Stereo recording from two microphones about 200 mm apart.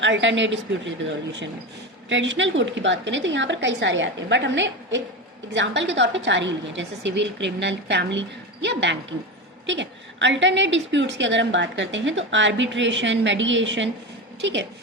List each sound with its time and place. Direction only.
0.0 s a woman's voice: 65° right (ahead or behind)
2.0 s a woman's voice: 65° right (ahead or behind)